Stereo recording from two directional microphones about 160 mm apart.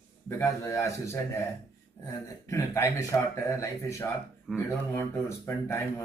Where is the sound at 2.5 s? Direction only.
20° left (ahead or behind).